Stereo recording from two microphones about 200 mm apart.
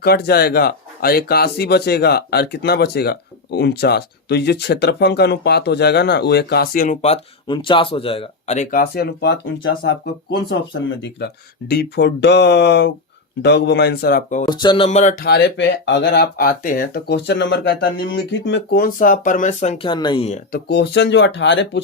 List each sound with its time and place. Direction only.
0.0 s speech: 50° left (ahead or behind)
14.4 s speech: 20° left (ahead or behind)
20.5 s speech: 55° left (ahead or behind)